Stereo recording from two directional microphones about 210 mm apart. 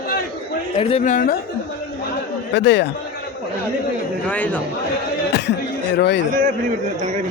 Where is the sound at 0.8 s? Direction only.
30° left (ahead or behind).